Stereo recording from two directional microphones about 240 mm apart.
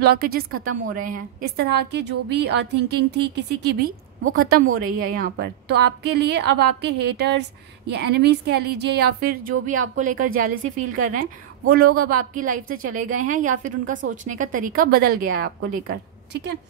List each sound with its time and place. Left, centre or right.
0.0 s a woman's voice: right
4.9 s a woman's voice: right